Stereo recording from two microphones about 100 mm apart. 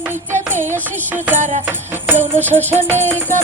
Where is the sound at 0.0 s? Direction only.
20° right (ahead or behind).